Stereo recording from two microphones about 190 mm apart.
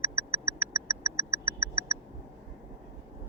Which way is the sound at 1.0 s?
15° right (ahead or behind).